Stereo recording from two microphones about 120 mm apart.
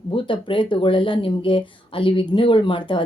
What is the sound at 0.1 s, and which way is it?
Speech, 45° left (ahead or behind).